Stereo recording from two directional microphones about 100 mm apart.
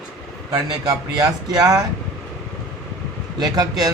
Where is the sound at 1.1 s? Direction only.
40° right (ahead or behind).